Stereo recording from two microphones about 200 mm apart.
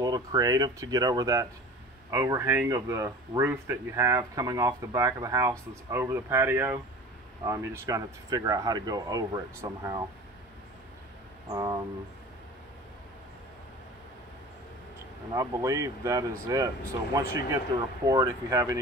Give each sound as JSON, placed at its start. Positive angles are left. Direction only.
{"t": 0.0, "sound": "speech", "side_deg": -20}
{"t": 11.4, "sound": "a sound", "side_deg": -20}
{"t": 15.3, "sound": "speech", "side_deg": -15}